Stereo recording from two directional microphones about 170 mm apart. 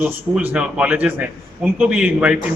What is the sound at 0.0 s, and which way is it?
A man's voice, 10° right (ahead or behind).